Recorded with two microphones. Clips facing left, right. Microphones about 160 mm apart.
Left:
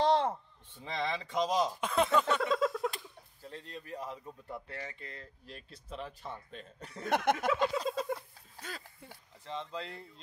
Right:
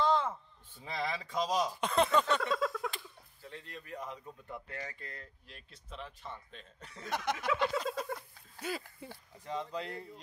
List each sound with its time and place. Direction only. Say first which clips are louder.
0.0 s a sound: left 3 dB; 35° left (ahead or behind)
0.9 s speech: left 2 dB; 25° left (ahead or behind)
1.8 s speech: even; 5° left (ahead or behind)
2.5 s a sound: left 3 dB; 20° left (ahead or behind)
3.4 s speech: left 2 dB; 35° left (ahead or behind)
4.1 s speech: left 2 dB; 10° left (ahead or behind)
4.6 s speech: even; 25° left (ahead or behind)
5.9 s speech: left 3 dB; 5° left (ahead or behind)
6.6 s speech: left 5 dB; 40° left (ahead or behind)
7.1 s a sound: left 5 dB; 55° left (ahead or behind)
7.8 s a sound: left 3 dB; 30° left (ahead or behind)
8.5 s speech: right 7 dB; 10° right (ahead or behind)